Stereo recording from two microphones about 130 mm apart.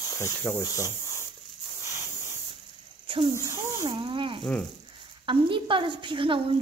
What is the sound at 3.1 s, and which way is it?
A woman's voice, 45° right (ahead or behind).